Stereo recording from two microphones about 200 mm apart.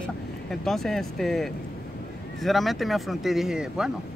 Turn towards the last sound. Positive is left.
turn(degrees=0)  # may be behind; listen again after turning